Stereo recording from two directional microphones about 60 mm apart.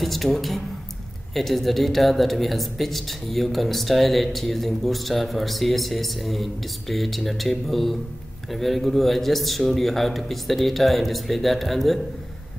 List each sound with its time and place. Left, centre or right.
0.0 s speech: centre